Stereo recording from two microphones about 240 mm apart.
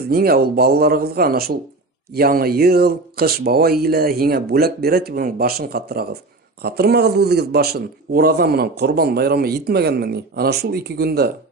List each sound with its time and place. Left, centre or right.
0.0 s a man's voice: right